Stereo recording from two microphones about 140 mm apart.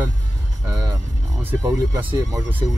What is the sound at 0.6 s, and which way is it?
Speech, 25° right (ahead or behind).